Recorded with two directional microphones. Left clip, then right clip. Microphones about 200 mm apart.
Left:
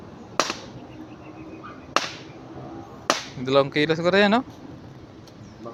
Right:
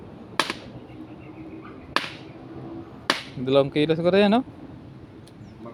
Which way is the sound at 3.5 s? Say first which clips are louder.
Even; 20° right (ahead or behind).